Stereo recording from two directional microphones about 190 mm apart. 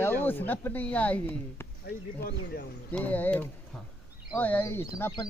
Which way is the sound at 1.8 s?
55° left (ahead or behind).